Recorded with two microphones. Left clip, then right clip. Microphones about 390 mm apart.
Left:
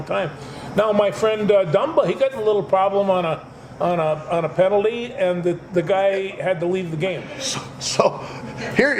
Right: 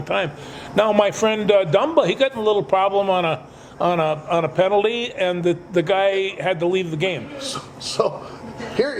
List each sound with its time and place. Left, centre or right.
0.1 s a man's voice: right
7.5 s speech: left